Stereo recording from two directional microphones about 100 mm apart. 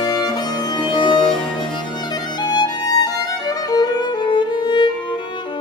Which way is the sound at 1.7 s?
50° left (ahead or behind).